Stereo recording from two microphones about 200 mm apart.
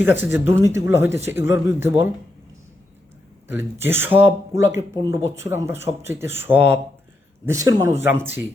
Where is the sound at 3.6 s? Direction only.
10° right (ahead or behind).